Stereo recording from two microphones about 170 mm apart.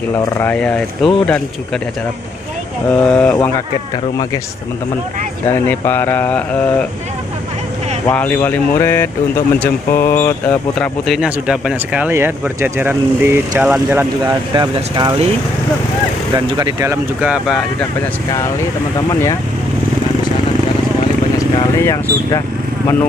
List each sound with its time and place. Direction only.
0.1 s speech: 10° left (ahead or behind)
2.9 s speech: 5° left (ahead or behind)
5.5 s speech: 15° left (ahead or behind)
8.1 s speech: 10° left (ahead or behind); by 14.0 s 10° right (ahead or behind)
14.2 s speech: 25° right (ahead or behind)
16.3 s speech: 25° right (ahead or behind)
21.8 s speech: 20° left (ahead or behind)